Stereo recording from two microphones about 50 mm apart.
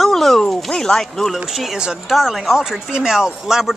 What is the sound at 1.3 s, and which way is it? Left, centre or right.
Speech, centre.